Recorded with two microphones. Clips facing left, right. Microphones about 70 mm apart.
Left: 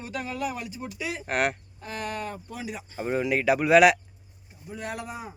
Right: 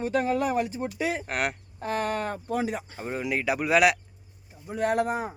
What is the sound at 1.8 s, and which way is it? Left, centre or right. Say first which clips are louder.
Speech: right 5 dB; right.